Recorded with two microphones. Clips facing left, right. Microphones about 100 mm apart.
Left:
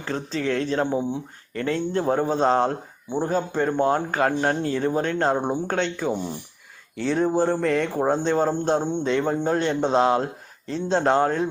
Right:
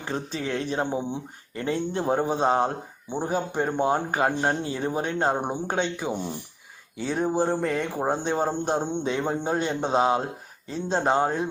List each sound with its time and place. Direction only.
0.0 s speech: 15° right (ahead or behind)